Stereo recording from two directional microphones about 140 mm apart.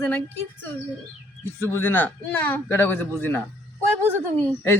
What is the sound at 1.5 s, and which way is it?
Speech, 15° left (ahead or behind).